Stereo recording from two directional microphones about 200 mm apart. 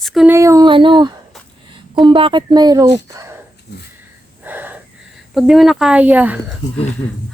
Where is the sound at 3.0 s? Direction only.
15° right (ahead or behind).